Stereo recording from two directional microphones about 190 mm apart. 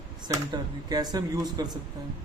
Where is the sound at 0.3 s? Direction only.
20° right (ahead or behind).